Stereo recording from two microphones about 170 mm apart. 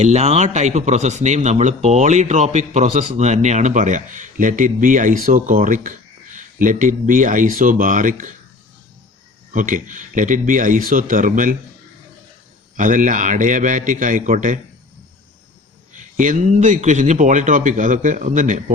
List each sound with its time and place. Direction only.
0.0 s speech: 40° right (ahead or behind)
9.5 s speech: 50° right (ahead or behind)
12.7 s speech: 50° right (ahead or behind)
16.0 s speech: 50° right (ahead or behind)